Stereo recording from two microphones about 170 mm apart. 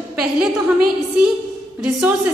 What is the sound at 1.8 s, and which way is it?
Speech, 5° right (ahead or behind).